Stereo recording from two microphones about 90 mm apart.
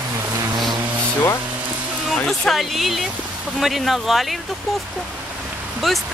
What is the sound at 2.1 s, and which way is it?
Speech, 5° left (ahead or behind).